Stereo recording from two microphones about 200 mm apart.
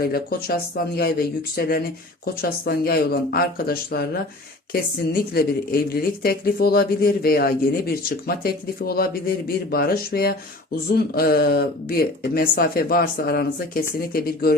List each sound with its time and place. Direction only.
0.0 s speech: 50° left (ahead or behind)